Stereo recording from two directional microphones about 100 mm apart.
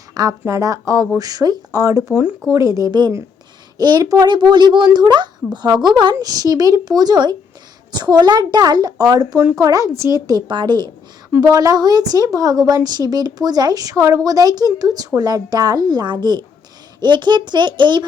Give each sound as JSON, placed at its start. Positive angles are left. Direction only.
{"t": 0.1, "sound": "a sound", "side_deg": -40}
{"t": 0.4, "sound": "a woman's voice", "side_deg": -30}
{"t": 6.1, "sound": "a woman's voice", "side_deg": -35}
{"t": 11.3, "sound": "a woman's voice", "side_deg": -35}